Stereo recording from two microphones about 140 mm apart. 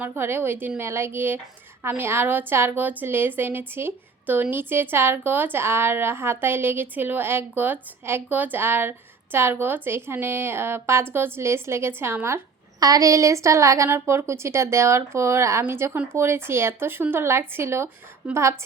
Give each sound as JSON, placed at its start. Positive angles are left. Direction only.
{"t": 0.0, "sound": "a woman's voice", "side_deg": -15}